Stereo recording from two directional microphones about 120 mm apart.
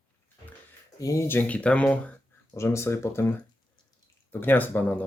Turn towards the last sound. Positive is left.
turn(degrees=15)  # may be behind; listen again after turning